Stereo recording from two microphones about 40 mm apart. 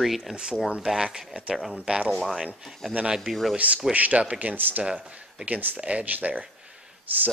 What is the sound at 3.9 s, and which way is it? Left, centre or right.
Speech, right.